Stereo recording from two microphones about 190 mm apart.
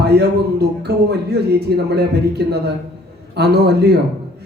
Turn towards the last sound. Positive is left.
turn(degrees=-60)  # may be behind; listen again after turning